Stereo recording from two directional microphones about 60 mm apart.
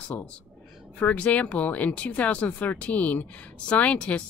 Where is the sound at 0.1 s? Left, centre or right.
Left.